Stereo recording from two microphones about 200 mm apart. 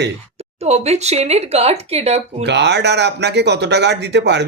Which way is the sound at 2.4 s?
60° right (ahead or behind).